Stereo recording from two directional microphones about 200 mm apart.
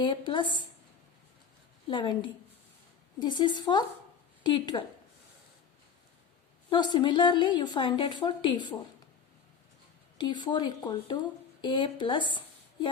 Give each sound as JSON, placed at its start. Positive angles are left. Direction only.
{"t": 0.0, "sound": "a woman's voice", "side_deg": 25}
{"t": 1.9, "sound": "a woman's voice", "side_deg": 25}
{"t": 6.7, "sound": "a woman's voice", "side_deg": 20}
{"t": 10.2, "sound": "a woman's voice", "side_deg": 20}